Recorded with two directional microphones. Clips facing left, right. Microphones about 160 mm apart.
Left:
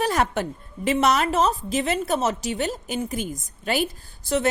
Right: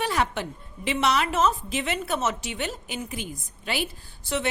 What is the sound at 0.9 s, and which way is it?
A woman's voice, 45° left (ahead or behind).